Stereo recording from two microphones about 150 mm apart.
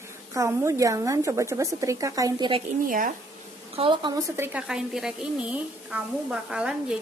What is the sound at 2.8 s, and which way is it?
Speech, 65° right (ahead or behind).